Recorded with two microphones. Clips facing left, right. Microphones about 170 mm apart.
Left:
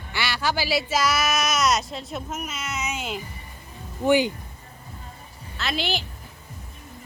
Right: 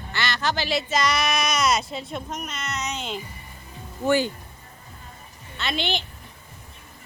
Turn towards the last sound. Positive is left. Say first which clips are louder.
# even
turn(degrees=5)  # may be behind; listen again after turning